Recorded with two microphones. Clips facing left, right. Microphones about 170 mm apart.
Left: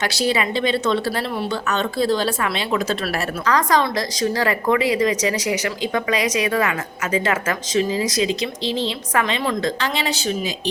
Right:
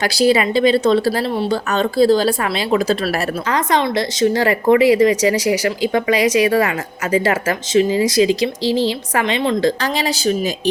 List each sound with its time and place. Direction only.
0.0 s speech: 35° right (ahead or behind)